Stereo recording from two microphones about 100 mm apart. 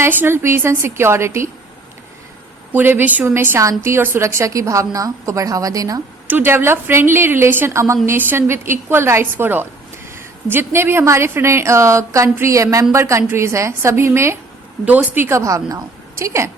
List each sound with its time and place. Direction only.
0.0 s a woman's voice: 20° right (ahead or behind)
2.7 s a woman's voice: 20° right (ahead or behind); by 6.0 s 35° right (ahead or behind)
6.2 s a woman's voice: 20° right (ahead or behind)